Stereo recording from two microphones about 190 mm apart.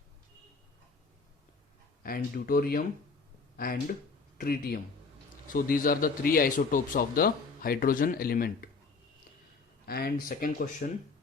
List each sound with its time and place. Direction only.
2.0 s a man's voice: 50° left (ahead or behind)
9.8 s a man's voice: 55° left (ahead or behind)